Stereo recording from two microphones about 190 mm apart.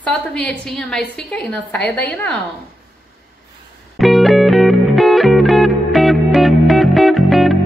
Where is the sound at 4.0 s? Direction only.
Centre (ahead or behind).